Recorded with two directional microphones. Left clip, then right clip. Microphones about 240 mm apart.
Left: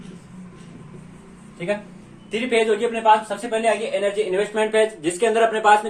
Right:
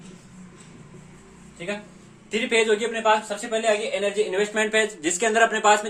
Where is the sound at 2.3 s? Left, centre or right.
Right.